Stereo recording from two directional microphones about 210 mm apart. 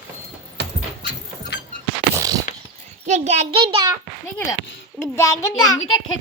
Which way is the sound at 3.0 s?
35° right (ahead or behind).